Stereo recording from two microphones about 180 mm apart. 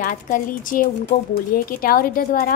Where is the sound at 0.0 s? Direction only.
45° left (ahead or behind).